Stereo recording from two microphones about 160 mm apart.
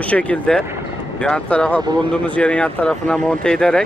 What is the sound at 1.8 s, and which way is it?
Speech, 25° right (ahead or behind).